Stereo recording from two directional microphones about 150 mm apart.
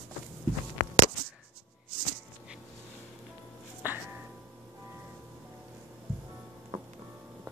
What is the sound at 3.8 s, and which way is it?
Music, 10° right (ahead or behind).